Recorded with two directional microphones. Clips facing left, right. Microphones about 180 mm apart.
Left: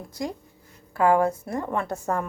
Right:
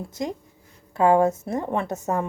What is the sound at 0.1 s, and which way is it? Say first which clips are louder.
A woman's voice: right 2 dB; 20° right (ahead or behind).